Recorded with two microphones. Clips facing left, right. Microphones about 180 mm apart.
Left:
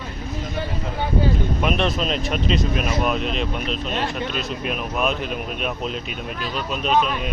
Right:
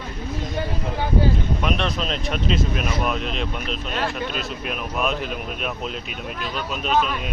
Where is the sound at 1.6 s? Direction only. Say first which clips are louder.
Left 4 dB; centre (ahead or behind).